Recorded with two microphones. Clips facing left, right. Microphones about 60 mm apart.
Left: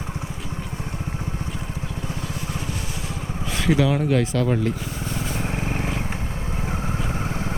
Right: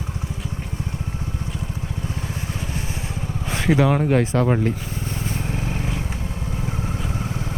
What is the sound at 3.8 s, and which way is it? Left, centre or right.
Speech, right.